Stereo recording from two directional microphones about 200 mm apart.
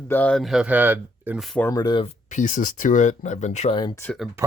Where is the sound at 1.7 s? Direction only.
20° left (ahead or behind).